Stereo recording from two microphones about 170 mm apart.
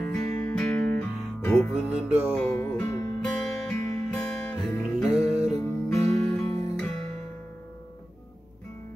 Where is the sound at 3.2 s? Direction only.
5° left (ahead or behind).